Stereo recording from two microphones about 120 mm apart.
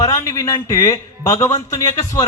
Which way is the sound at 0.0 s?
30° left (ahead or behind).